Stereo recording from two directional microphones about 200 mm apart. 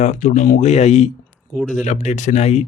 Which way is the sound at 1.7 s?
35° left (ahead or behind).